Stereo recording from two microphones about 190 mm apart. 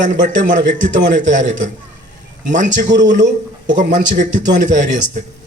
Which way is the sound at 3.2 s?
65° right (ahead or behind).